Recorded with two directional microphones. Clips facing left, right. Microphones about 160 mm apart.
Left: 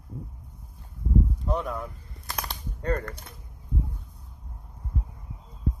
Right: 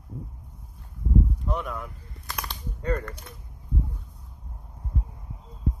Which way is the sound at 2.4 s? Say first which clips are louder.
Even; 45° left (ahead or behind).